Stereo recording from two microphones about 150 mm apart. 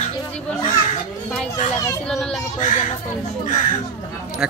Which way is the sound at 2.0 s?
5° left (ahead or behind).